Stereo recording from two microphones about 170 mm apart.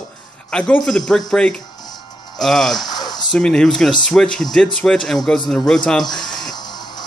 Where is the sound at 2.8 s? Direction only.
25° left (ahead or behind).